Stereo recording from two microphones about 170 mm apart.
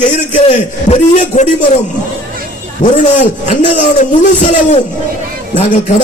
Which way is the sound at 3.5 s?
45° left (ahead or behind).